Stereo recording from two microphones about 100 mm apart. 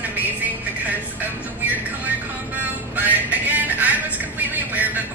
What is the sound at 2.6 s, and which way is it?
Music, 15° right (ahead or behind).